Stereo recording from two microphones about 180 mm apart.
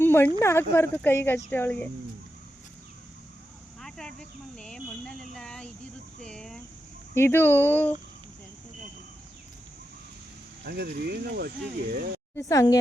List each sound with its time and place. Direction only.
0.0 s speech: 10° left (ahead or behind)
3.8 s a sound: centre (ahead or behind)
7.1 s speech: 15° left (ahead or behind)
10.6 s speech: 60° right (ahead or behind)
12.4 s speech: 15° left (ahead or behind)